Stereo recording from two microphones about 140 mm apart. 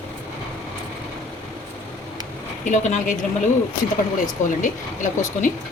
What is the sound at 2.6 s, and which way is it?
Speech, 60° left (ahead or behind).